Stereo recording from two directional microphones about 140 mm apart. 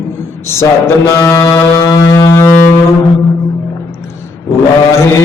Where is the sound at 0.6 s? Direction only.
20° left (ahead or behind).